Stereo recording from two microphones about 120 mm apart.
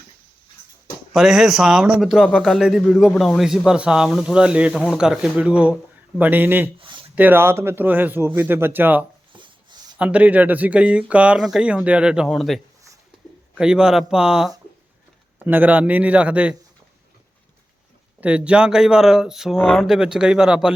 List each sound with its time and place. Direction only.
1.1 s speech: 5° right (ahead or behind)
6.7 s a sound: 45° right (ahead or behind)
7.2 s speech: 15° right (ahead or behind)
9.3 s a sound: 40° right (ahead or behind)
10.0 s speech: 10° right (ahead or behind)
18.2 s speech: 10° right (ahead or behind)